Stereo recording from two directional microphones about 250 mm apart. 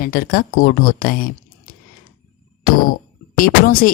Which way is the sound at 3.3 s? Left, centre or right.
Left.